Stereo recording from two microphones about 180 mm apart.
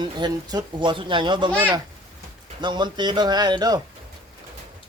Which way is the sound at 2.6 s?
25° right (ahead or behind).